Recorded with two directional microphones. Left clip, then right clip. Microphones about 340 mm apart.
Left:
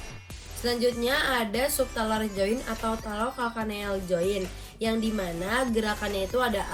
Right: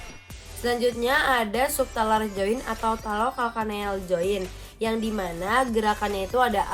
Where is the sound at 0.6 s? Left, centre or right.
Centre.